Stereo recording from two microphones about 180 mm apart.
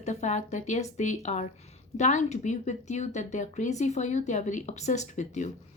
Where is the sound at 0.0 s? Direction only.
40° left (ahead or behind).